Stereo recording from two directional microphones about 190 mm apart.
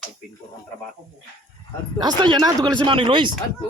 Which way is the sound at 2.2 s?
20° right (ahead or behind).